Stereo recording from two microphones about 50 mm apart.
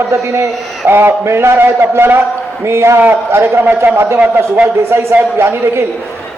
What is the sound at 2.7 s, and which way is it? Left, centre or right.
A man's voice, right.